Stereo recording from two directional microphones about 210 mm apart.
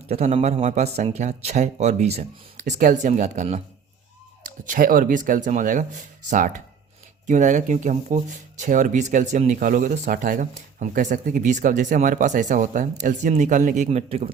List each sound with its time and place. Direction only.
0.1 s speech: 30° right (ahead or behind)